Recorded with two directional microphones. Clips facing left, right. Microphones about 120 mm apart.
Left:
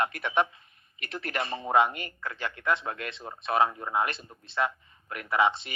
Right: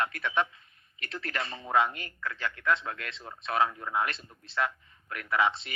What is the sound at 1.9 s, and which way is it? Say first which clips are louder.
Speech: left 1 dB; 30° left (ahead or behind).